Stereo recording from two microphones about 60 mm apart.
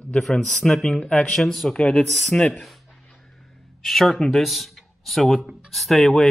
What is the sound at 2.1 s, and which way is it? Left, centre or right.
Speech, centre.